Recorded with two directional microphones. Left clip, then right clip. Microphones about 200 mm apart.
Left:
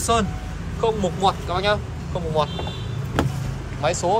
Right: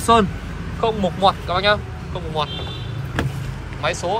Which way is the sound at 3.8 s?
20° left (ahead or behind).